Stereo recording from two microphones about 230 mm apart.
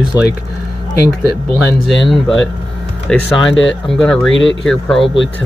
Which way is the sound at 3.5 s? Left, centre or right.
Left.